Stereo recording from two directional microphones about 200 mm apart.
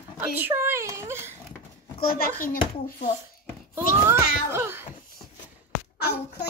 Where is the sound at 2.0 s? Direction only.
45° left (ahead or behind).